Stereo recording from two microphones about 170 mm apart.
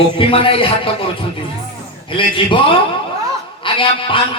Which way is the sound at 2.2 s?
30° left (ahead or behind).